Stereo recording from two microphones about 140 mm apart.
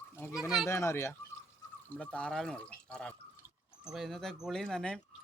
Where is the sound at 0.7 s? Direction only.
20° left (ahead or behind).